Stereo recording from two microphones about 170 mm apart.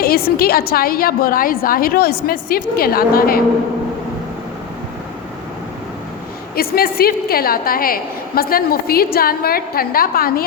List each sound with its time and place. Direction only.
0.0 s a woman's voice: 60° left (ahead or behind)
6.6 s a woman's voice: 60° left (ahead or behind)